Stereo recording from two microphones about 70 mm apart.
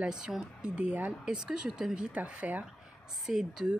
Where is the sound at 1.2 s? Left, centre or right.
Centre.